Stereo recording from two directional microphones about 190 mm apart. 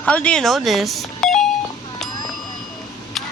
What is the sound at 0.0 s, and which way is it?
Speech, 5° left (ahead or behind).